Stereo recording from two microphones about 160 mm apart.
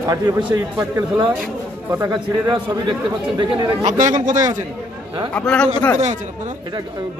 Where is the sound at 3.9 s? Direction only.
50° right (ahead or behind).